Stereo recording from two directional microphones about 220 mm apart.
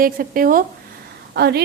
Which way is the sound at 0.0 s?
40° right (ahead or behind).